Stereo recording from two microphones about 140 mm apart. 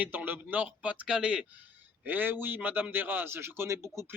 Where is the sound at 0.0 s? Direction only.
10° right (ahead or behind).